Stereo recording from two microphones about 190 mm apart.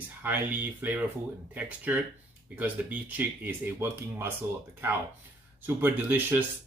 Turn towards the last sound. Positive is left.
turn(degrees=-10)  # may be behind; listen again after turning